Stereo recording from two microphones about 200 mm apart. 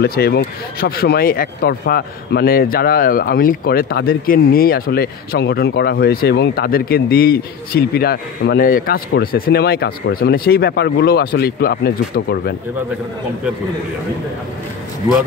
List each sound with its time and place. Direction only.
0.0 s speech: 50° left (ahead or behind)